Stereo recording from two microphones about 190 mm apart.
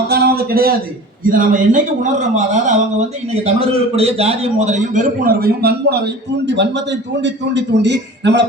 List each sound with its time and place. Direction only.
0.1 s a sound: 55° right (ahead or behind)
1.2 s a man's voice: 45° right (ahead or behind)
6.4 s a man's voice: 65° right (ahead or behind)